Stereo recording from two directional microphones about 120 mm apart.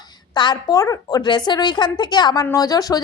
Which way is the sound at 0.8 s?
30° left (ahead or behind).